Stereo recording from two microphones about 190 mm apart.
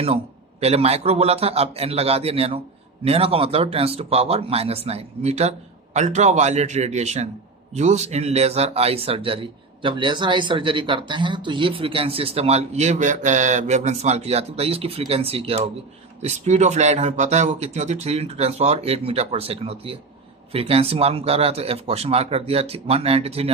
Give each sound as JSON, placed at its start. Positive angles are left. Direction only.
{"t": 0.6, "sound": "speech", "side_deg": -35}